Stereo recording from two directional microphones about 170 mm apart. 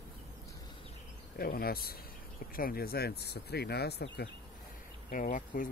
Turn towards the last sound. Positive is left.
turn(degrees=55)  # may be behind; listen again after turning